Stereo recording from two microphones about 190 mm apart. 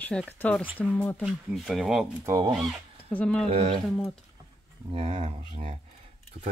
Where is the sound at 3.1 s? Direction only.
5° left (ahead or behind).